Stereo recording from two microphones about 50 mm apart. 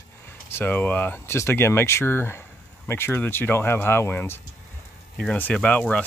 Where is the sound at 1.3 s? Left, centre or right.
Left.